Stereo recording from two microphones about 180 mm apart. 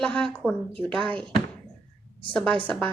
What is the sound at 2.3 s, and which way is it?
Speech, 5° left (ahead or behind).